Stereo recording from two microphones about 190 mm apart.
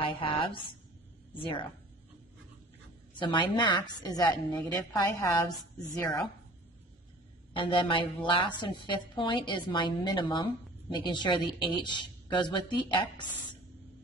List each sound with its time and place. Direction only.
0.0 s a woman's voice: 25° left (ahead or behind)
3.2 s a woman's voice: 25° left (ahead or behind)
7.5 s a woman's voice: 25° left (ahead or behind)